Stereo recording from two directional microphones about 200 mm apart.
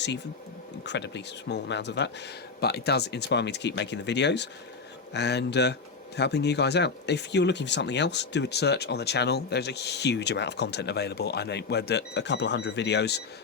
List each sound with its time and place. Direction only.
0.9 s speech: 60° left (ahead or behind)